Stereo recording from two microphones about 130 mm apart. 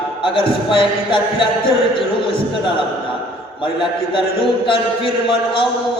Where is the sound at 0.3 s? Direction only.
40° left (ahead or behind).